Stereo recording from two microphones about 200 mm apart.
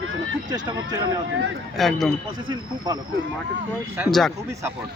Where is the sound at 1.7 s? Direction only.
Centre (ahead or behind).